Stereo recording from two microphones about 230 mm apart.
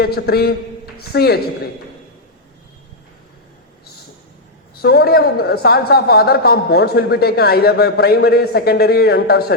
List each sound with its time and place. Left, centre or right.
0.0 s a man's voice: left
4.7 s a man's voice: left